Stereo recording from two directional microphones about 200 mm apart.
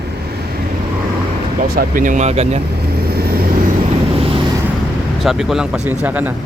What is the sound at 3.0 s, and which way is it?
Vehicle, 50° right (ahead or behind).